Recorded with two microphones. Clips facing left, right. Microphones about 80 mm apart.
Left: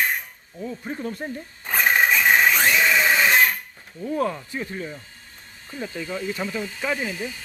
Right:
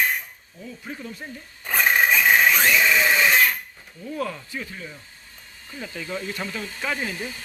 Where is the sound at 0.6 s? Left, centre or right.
Left.